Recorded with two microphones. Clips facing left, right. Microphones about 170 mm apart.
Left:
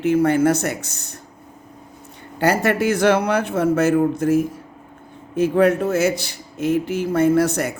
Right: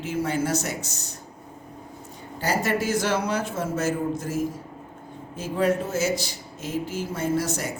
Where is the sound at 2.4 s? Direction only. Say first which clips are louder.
Left 7 dB; 65° left (ahead or behind).